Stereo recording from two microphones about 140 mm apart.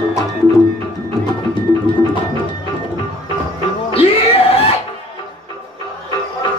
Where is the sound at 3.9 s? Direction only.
45° left (ahead or behind).